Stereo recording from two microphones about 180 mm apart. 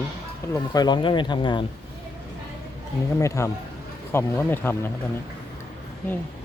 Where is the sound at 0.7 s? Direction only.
25° left (ahead or behind).